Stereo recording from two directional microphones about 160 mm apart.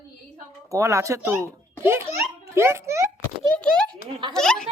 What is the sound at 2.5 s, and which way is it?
Speech, 15° right (ahead or behind).